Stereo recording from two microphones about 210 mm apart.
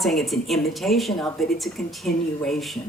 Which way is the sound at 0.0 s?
Centre (ahead or behind).